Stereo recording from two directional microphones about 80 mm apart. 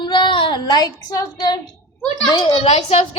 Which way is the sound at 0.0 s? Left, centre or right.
Left.